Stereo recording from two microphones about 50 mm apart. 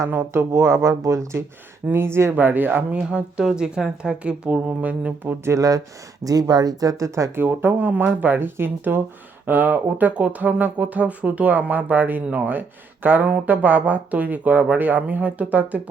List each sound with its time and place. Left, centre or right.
0.1 s speech: right
0.5 s speech: right
1.9 s speech: right
2.3 s speech: right
2.9 s a woman's voice: right
4.2 s speech: right
6.9 s speech: right
7.3 s speech: right